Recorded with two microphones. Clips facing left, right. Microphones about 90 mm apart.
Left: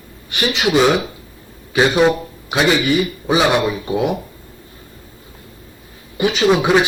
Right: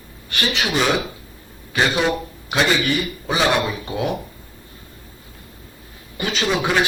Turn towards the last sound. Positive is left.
turn(degrees=15)  # may be behind; listen again after turning